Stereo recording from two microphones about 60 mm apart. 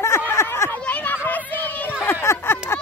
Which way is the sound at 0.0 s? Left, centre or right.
Left.